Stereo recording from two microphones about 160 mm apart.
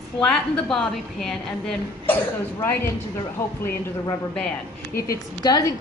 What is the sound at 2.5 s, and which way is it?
Speech, 15° left (ahead or behind).